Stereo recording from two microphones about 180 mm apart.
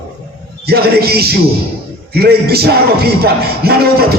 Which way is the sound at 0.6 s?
60° right (ahead or behind).